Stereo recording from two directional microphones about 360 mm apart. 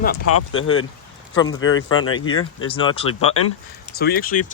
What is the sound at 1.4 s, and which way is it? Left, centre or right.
Speech, centre.